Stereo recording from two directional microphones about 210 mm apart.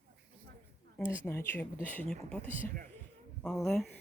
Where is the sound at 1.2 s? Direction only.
10° left (ahead or behind).